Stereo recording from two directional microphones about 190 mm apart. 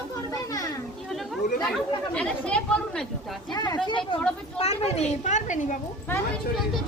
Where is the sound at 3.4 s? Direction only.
20° left (ahead or behind); by 5.7 s 40° left (ahead or behind).